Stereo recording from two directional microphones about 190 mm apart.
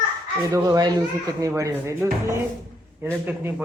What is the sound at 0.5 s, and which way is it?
A man's voice, 20° right (ahead or behind).